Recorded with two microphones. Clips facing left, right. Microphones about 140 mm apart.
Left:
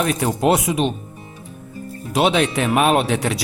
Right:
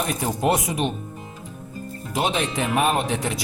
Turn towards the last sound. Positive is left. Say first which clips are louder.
# left 5 dB
turn(degrees=75)  # may be behind; listen again after turning